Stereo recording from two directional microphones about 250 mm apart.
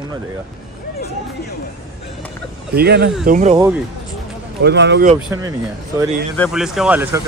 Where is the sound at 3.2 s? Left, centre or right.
Right.